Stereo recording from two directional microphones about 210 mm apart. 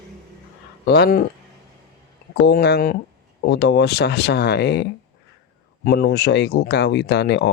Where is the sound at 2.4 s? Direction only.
50° left (ahead or behind).